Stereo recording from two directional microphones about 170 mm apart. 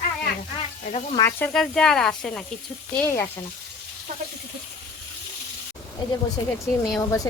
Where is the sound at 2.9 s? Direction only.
10° left (ahead or behind).